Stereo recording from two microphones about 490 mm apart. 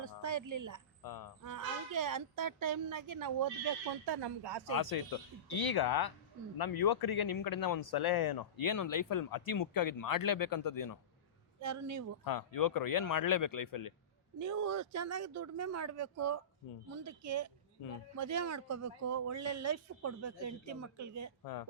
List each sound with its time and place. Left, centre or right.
0.2 s speech: right
1.0 s speech: left
1.5 s speech: right
4.7 s speech: left
11.6 s speech: right
12.2 s speech: left
14.3 s speech: right
21.4 s speech: left